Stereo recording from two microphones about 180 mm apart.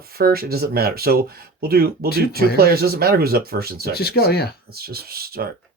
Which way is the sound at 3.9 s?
60° left (ahead or behind).